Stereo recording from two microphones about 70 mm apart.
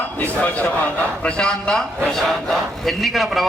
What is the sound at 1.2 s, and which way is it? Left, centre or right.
A man's voice, centre.